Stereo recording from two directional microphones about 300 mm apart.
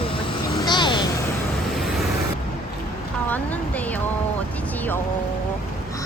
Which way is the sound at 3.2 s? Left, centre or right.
Centre.